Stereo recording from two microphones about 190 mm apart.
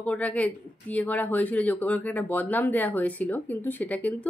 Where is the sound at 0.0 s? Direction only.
5° left (ahead or behind).